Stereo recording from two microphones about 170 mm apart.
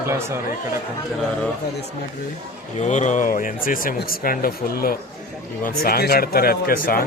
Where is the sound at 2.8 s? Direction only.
45° left (ahead or behind).